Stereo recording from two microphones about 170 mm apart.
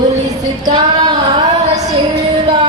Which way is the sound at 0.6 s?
25° right (ahead or behind).